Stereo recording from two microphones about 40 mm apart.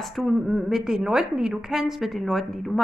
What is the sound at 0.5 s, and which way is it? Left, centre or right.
A woman's voice, centre.